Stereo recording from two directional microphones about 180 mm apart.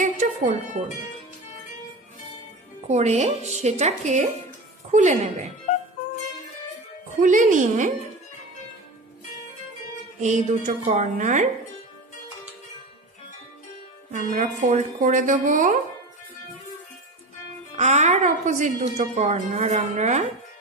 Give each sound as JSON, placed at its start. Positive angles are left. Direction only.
{"t": 0.0, "sound": "wind chime", "side_deg": -45}
{"t": 2.9, "sound": "a woman's voice", "side_deg": -40}
{"t": 7.2, "sound": "speech", "side_deg": -45}
{"t": 10.2, "sound": "speech", "side_deg": -40}
{"t": 14.1, "sound": "speech", "side_deg": -45}
{"t": 17.7, "sound": "a woman's voice", "side_deg": -40}